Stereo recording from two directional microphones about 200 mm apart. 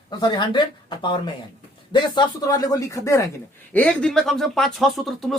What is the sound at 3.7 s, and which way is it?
Speech, 5° left (ahead or behind).